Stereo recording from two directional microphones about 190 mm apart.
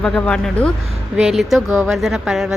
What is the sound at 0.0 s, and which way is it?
A woman's voice, 5° left (ahead or behind).